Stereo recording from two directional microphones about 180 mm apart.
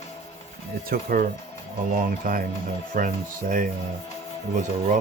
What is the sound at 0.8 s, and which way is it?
Speech, 55° right (ahead or behind).